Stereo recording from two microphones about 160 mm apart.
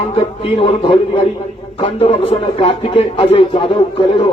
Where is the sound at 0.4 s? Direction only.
35° left (ahead or behind).